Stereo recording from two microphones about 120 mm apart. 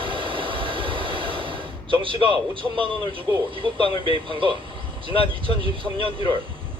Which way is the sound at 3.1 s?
45° right (ahead or behind).